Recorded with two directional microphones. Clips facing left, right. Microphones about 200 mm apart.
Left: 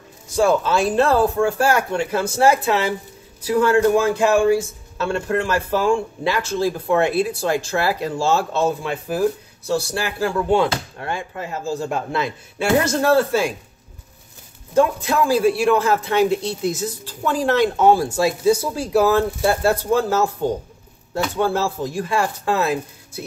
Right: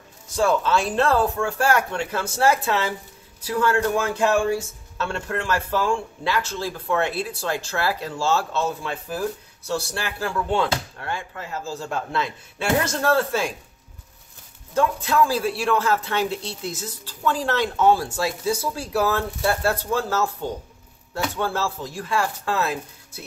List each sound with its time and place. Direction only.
0.4 s a man's voice: 10° left (ahead or behind)
14.7 s a man's voice: 15° left (ahead or behind)